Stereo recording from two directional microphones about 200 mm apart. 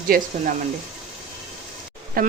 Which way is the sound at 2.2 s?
45° right (ahead or behind).